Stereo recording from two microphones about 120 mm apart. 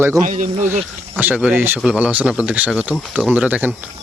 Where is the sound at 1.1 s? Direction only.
15° right (ahead or behind).